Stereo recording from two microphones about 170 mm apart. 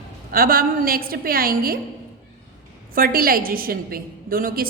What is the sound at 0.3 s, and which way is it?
A woman's voice, 60° right (ahead or behind).